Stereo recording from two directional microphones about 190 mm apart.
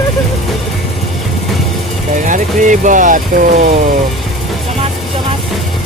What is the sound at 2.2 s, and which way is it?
Speech, 40° right (ahead or behind).